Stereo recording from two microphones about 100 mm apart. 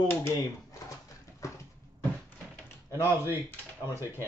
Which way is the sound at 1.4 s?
30° left (ahead or behind).